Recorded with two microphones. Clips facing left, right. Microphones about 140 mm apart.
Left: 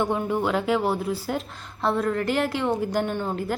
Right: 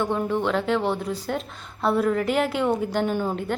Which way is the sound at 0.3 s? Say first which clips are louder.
Even; 10° left (ahead or behind).